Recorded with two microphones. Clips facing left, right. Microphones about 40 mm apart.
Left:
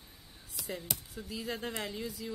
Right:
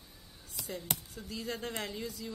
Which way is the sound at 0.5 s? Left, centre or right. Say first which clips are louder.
Left 1 dB; centre.